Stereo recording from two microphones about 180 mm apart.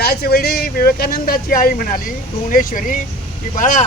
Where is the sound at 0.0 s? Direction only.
60° left (ahead or behind).